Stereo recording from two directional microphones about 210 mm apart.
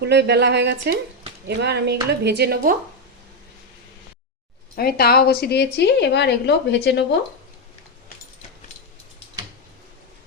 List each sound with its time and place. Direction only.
0.0 s speech: 55° right (ahead or behind)
4.7 s a woman's voice: 45° left (ahead or behind)